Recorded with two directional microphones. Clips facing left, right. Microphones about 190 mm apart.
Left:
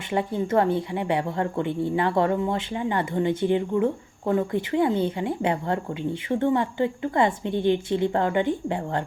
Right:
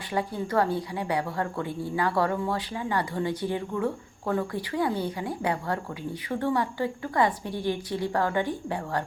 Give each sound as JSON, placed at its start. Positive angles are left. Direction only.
{"t": 0.1, "sound": "a woman's voice", "side_deg": 25}